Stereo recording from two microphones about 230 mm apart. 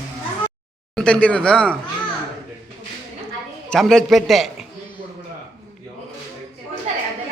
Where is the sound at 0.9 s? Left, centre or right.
Centre.